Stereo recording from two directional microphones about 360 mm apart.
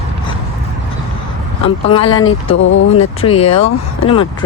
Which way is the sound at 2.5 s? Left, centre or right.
Left.